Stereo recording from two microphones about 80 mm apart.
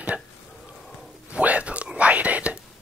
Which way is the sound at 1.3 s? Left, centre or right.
Centre.